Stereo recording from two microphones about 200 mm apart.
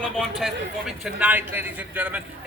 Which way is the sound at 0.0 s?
Centre (ahead or behind).